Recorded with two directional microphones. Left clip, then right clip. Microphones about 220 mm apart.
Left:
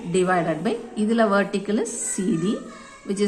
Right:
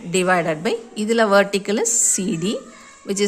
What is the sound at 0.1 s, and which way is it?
A woman's voice, 45° right (ahead or behind).